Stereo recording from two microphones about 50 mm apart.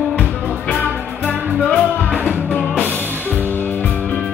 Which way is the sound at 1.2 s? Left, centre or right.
Left.